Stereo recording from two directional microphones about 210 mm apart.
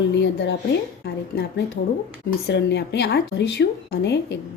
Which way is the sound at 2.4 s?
55° left (ahead or behind).